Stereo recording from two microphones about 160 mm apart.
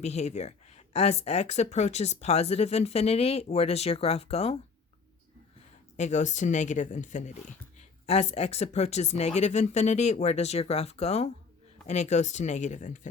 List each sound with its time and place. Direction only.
0.0 s speech: 45° left (ahead or behind)
6.0 s speech: 45° left (ahead or behind)